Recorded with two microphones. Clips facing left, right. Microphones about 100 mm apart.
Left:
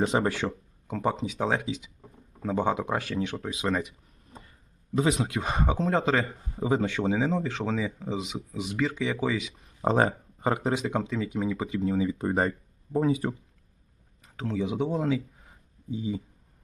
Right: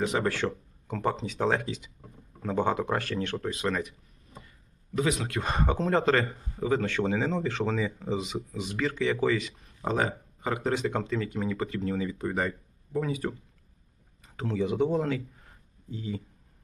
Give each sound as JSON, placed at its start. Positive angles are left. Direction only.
{"t": 0.0, "sound": "speech", "side_deg": 25}
{"t": 0.3, "sound": "speech", "side_deg": 5}
{"t": 4.9, "sound": "speech", "side_deg": 25}
{"t": 5.3, "sound": "speech", "side_deg": 5}
{"t": 6.6, "sound": "speech", "side_deg": 20}
{"t": 6.9, "sound": "speech", "side_deg": 5}
{"t": 9.8, "sound": "speech", "side_deg": 35}
{"t": 10.6, "sound": "speech", "side_deg": 15}
{"t": 12.2, "sound": "speech", "side_deg": 30}
{"t": 13.1, "sound": "speech", "side_deg": 20}
{"t": 14.2, "sound": "a man's voice", "side_deg": 0}